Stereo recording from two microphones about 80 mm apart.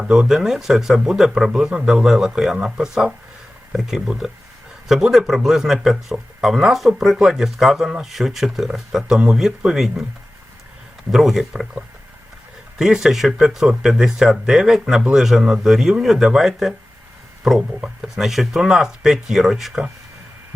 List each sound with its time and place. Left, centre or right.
0.0 s speech: centre
11.1 s speech: centre
12.8 s speech: centre